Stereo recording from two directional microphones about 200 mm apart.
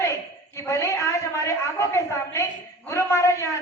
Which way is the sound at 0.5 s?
15° left (ahead or behind).